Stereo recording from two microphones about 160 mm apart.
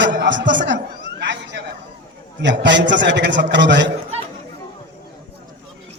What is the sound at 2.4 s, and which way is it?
A man's voice, 90° right.